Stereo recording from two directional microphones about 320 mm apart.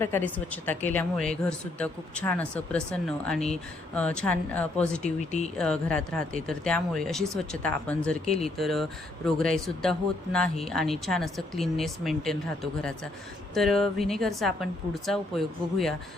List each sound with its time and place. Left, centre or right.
0.3 s speech: centre
5.0 s speech: left
5.5 s speech: centre
13.5 s speech: centre